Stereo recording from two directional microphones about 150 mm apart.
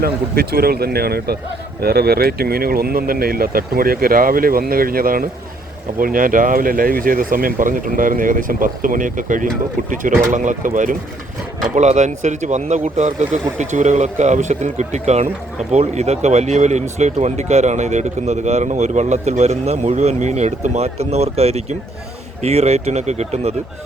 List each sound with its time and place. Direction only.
0.0 s speech: 90° right; by 23.6 s 45° right (ahead or behind)